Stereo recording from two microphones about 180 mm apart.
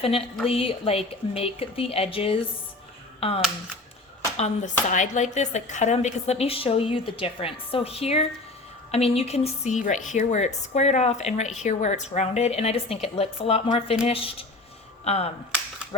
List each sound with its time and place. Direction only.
0.4 s speech: 30° left (ahead or behind)